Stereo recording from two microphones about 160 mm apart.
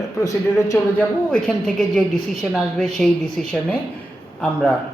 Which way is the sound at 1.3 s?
5° left (ahead or behind).